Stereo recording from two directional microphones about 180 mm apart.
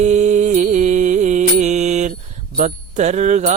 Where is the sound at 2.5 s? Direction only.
40° right (ahead or behind).